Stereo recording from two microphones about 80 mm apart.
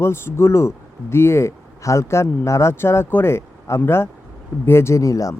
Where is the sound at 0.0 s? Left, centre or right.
Left.